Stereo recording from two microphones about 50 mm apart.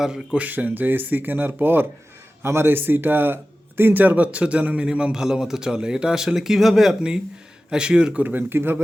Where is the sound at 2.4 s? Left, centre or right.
Right; by 6.9 s centre.